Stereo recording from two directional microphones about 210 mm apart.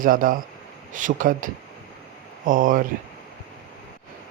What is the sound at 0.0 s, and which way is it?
A man's voice, 40° right (ahead or behind).